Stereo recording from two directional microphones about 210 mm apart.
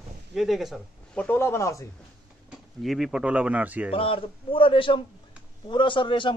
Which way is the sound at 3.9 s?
25° left (ahead or behind).